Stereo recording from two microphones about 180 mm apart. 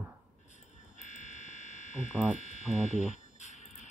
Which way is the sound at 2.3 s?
40° left (ahead or behind).